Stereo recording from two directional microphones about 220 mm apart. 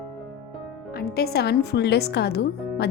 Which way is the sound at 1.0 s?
45° left (ahead or behind).